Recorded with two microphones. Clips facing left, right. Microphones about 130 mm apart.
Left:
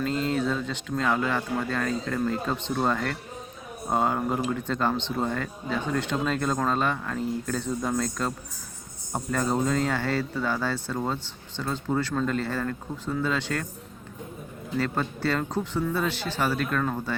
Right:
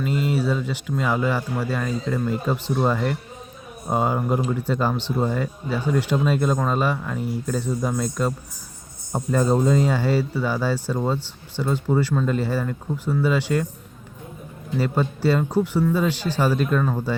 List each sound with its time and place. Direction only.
0.0 s speech: 10° right (ahead or behind)
14.8 s speech: 15° right (ahead or behind)